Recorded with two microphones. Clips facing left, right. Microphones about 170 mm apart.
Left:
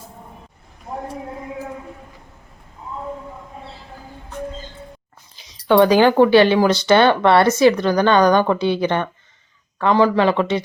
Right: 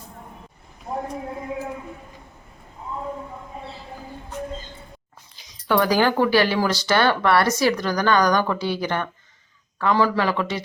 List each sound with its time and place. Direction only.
5.6 s speech: 25° left (ahead or behind)